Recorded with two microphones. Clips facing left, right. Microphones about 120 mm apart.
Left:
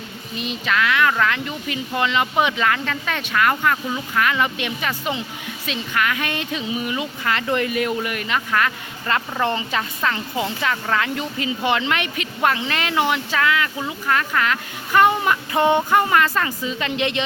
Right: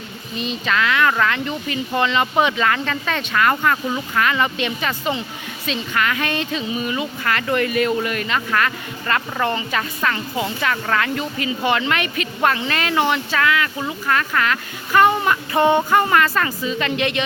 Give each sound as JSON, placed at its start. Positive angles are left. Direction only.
{"t": 0.3, "sound": "speech", "side_deg": 5}